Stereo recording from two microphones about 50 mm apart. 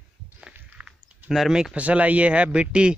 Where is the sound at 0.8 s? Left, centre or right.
Centre.